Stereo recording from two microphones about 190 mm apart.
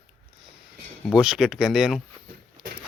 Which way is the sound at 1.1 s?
5° right (ahead or behind).